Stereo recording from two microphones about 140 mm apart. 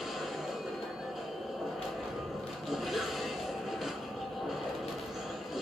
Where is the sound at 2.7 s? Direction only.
Centre (ahead or behind).